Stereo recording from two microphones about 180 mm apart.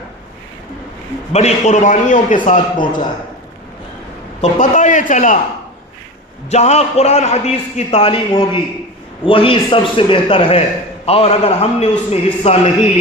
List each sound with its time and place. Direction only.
1.3 s a man's voice: 35° left (ahead or behind)
2.7 s a man's voice: 25° left (ahead or behind)
4.4 s a man's voice: 45° left (ahead or behind)
6.5 s a man's voice: 40° left (ahead or behind)